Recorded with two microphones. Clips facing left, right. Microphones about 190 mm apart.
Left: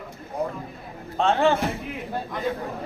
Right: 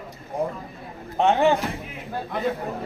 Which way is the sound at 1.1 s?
20° right (ahead or behind).